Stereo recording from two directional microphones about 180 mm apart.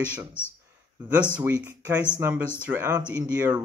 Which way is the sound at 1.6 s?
10° right (ahead or behind).